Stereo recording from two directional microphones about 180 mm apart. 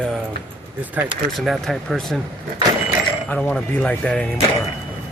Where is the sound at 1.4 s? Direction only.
Centre (ahead or behind).